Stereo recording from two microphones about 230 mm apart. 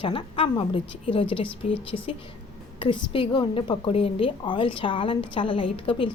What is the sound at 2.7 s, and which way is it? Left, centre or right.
A woman's voice, left.